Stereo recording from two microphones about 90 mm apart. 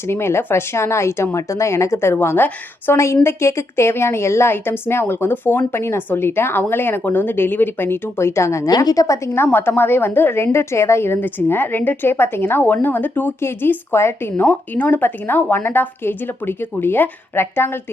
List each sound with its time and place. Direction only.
0.1 s a woman's voice: 30° left (ahead or behind)
8.7 s a woman's voice: 45° left (ahead or behind); by 17.7 s 25° left (ahead or behind)